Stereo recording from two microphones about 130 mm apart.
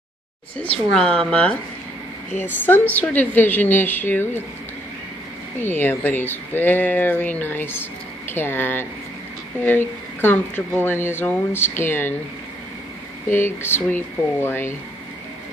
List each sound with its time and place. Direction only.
0.6 s speech: 5° left (ahead or behind)
5.6 s speech: 15° left (ahead or behind)
13.3 s speech: 15° left (ahead or behind)